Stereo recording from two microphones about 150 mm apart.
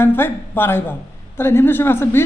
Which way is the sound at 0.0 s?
15° left (ahead or behind).